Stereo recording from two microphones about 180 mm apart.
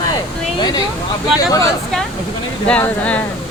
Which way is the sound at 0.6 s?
25° left (ahead or behind).